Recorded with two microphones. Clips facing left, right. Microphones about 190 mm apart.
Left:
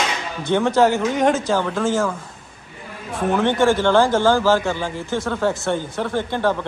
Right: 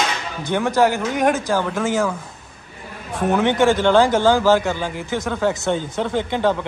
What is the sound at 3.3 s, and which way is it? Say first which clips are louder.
A man's voice: right 1 dB; 15° right (ahead or behind).